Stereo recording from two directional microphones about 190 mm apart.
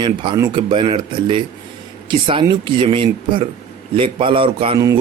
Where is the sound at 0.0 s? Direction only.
25° right (ahead or behind).